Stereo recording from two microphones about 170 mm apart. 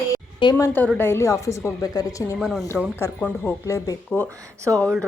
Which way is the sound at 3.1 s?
10° left (ahead or behind).